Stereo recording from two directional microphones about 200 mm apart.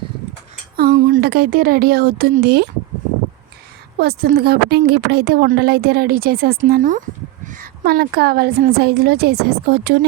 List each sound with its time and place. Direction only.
0.8 s a woman's voice: 50° right (ahead or behind)
4.0 s a woman's voice: 50° right (ahead or behind)